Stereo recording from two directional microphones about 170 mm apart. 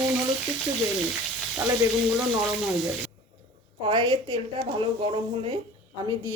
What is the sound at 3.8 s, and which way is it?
Speech, 30° right (ahead or behind).